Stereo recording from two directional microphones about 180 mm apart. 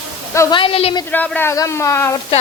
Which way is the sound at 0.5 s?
30° left (ahead or behind).